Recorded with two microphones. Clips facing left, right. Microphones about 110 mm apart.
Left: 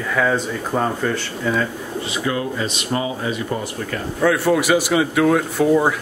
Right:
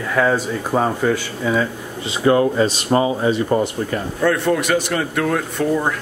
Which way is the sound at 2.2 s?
40° right (ahead or behind).